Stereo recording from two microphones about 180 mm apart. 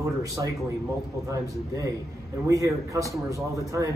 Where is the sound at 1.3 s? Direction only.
15° right (ahead or behind).